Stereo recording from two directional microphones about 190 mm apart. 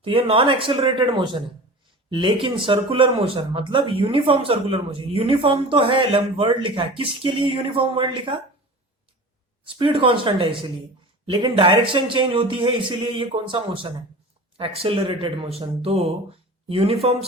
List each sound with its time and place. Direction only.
0.0 s speech: 30° right (ahead or behind)
9.6 s speech: 25° right (ahead or behind)